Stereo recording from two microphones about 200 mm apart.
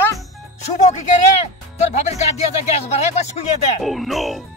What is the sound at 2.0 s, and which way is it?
Speech, 35° left (ahead or behind).